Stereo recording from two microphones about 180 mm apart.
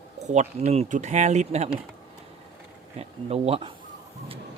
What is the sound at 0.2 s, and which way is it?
Speech, 40° right (ahead or behind).